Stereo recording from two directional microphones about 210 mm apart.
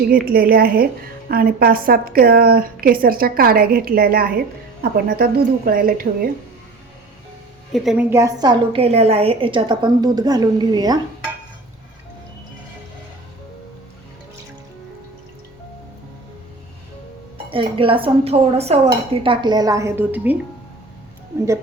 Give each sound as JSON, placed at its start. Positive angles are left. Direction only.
{"t": 0.1, "sound": "speech", "side_deg": -45}
{"t": 7.7, "sound": "a woman's voice", "side_deg": 0}
{"t": 8.1, "sound": "a woman's voice", "side_deg": -15}
{"t": 17.3, "sound": "a woman's voice", "side_deg": -25}